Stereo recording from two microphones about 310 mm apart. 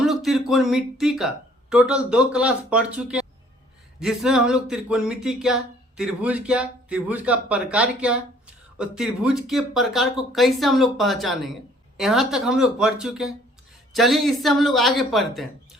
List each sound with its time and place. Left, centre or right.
0.0 s speech: centre